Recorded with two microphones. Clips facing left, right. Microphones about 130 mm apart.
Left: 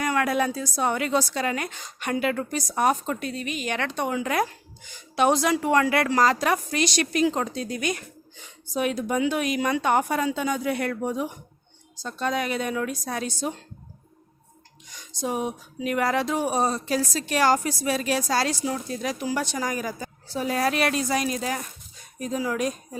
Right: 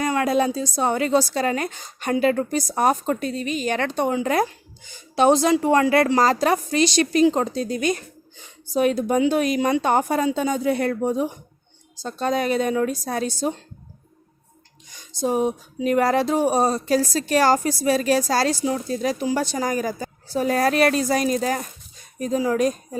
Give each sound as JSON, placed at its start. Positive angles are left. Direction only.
{"t": 0.0, "sound": "a woman's voice", "side_deg": -25}
{"t": 15.2, "sound": "a woman's voice", "side_deg": -35}